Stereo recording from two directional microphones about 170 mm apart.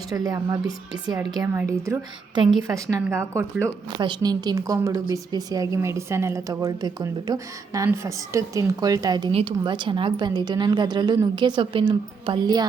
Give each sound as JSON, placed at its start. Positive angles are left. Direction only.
{"t": 0.1, "sound": "a woman's voice", "side_deg": -25}